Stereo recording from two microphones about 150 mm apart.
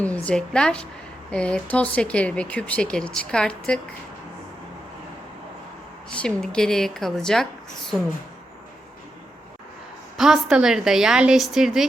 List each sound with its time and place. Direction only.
0.0 s speech: 10° left (ahead or behind)
6.1 s a woman's voice: 5° left (ahead or behind)
10.2 s a woman's voice: 5° right (ahead or behind)